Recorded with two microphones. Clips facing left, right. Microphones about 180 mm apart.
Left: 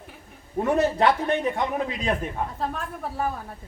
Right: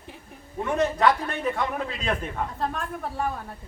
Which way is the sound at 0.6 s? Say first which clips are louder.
Left 1 dB; 30° left (ahead or behind).